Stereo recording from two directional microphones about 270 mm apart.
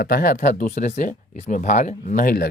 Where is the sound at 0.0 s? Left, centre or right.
Left.